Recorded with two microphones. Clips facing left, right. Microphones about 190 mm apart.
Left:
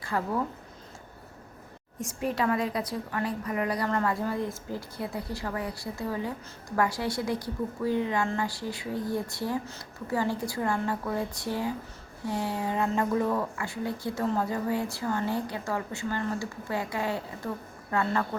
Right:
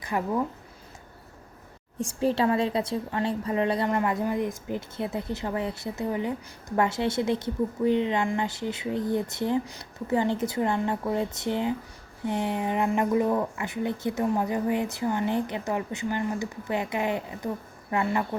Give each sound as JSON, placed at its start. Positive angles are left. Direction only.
{"t": 0.0, "sound": "speech", "side_deg": -15}
{"t": 2.0, "sound": "a woman's voice", "side_deg": -30}